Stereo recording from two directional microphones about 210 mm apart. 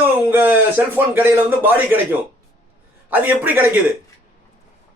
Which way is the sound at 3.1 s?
10° right (ahead or behind).